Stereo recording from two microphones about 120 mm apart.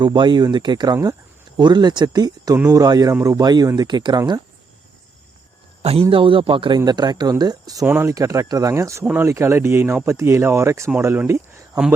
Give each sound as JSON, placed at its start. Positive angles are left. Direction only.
{"t": 0.0, "sound": "speech", "side_deg": -40}
{"t": 5.8, "sound": "speech", "side_deg": -55}